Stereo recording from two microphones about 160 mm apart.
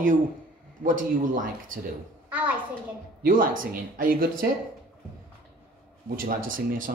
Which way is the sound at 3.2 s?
60° right (ahead or behind).